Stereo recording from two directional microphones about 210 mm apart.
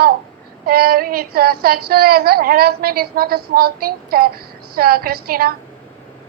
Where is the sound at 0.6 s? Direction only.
45° right (ahead or behind).